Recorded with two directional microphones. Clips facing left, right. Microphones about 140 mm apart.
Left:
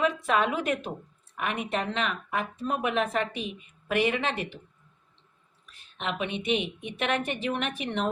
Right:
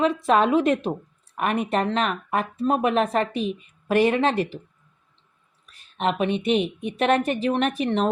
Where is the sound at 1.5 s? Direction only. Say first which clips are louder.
Right 7 dB; 45° right (ahead or behind).